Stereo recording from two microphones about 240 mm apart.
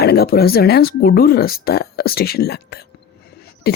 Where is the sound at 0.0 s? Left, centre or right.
Left.